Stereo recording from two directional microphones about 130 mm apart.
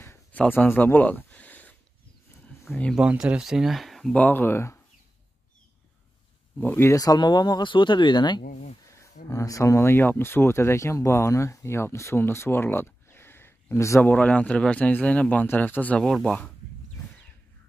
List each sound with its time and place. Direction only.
0.0 s a sound: 15° left (ahead or behind)
3.0 s speech: 10° right (ahead or behind)
4.2 s speech: 15° left (ahead or behind)
6.6 s speech: 15° left (ahead or behind); by 8.4 s 35° left (ahead or behind)
8.5 s speech: 60° left (ahead or behind)
8.9 s speech: 25° left (ahead or behind)
14.1 s speech: 10° left (ahead or behind)